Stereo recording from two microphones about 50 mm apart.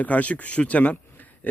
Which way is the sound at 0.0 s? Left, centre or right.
Left.